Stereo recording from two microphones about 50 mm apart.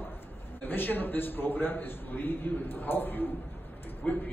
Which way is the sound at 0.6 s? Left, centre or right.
Left.